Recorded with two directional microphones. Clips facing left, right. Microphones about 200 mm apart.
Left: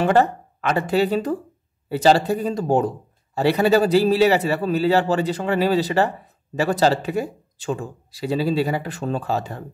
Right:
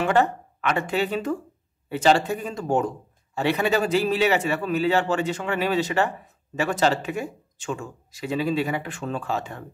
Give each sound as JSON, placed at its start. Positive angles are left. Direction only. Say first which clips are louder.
{"t": 0.0, "sound": "a man's voice", "louder": "left 3 dB", "side_deg": 35}